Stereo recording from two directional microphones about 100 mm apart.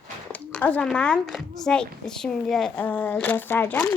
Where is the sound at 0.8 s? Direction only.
10° left (ahead or behind).